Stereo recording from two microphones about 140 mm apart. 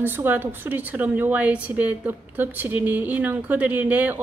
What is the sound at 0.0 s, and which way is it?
A woman's voice, 15° right (ahead or behind).